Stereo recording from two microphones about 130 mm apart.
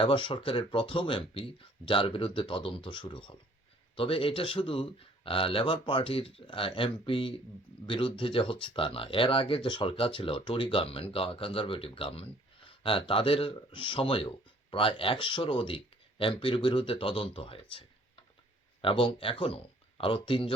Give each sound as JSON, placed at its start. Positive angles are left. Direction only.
{"t": 0.0, "sound": "speech", "side_deg": 40}